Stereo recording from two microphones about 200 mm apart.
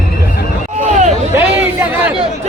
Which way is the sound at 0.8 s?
35° right (ahead or behind).